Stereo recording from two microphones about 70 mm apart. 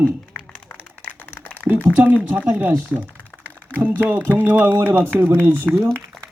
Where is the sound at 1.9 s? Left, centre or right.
Right.